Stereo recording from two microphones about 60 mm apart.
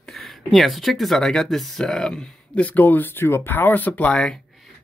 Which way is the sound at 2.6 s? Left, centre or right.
Left.